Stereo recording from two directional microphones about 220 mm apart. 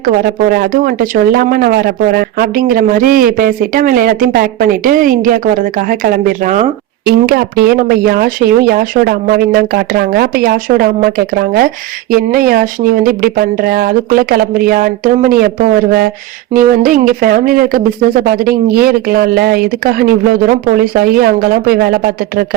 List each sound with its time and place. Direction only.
0.0 s speech: 45° right (ahead or behind)